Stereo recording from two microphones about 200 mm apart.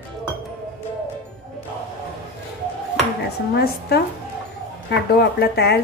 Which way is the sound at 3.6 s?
55° left (ahead or behind).